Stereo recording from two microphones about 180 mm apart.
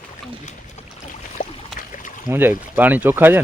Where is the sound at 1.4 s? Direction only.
50° left (ahead or behind).